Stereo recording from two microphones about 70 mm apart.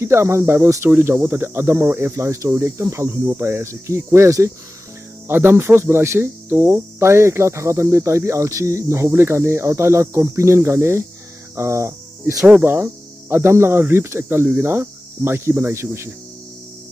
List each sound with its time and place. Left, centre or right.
0.0 s speech: right
0.8 s speech: right
1.4 s speech: right
11.5 s cricket: right
12.6 s speech: right